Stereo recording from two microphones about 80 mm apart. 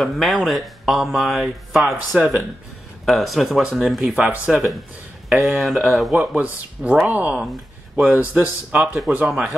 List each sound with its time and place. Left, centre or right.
0.0 s speech: centre
3.1 s speech: centre
4.2 s speech: centre
5.3 s speech: centre
6.1 s speech: centre